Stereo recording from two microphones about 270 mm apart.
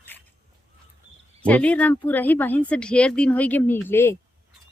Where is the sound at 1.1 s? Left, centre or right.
Right.